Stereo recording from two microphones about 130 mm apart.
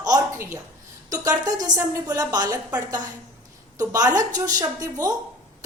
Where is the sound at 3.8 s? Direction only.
30° right (ahead or behind).